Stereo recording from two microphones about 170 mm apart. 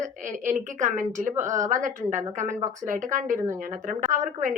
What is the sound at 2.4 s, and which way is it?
Speech, 15° right (ahead or behind).